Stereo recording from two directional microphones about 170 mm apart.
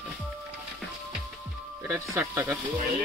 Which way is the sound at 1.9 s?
10° right (ahead or behind).